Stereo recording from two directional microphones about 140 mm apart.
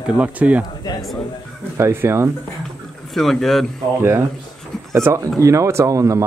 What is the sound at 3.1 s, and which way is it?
Speech, 5° left (ahead or behind).